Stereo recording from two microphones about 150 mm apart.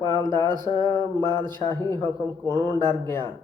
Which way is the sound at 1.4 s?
30° right (ahead or behind).